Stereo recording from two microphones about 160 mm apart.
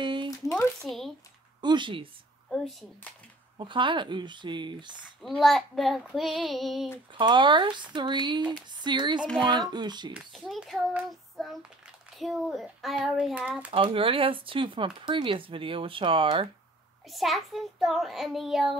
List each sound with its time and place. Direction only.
0.0 s a sound: 30° right (ahead or behind)
0.8 s child singing: centre (ahead or behind)
1.6 s speech: 30° right (ahead or behind)
2.5 s child singing: centre (ahead or behind)
3.5 s speech: 30° right (ahead or behind)
5.2 s child singing: centre (ahead or behind)
7.2 s speech: 30° right (ahead or behind)
10.1 s child singing: centre (ahead or behind)
13.7 s speech: 35° right (ahead or behind)
17.1 s child singing: centre (ahead or behind)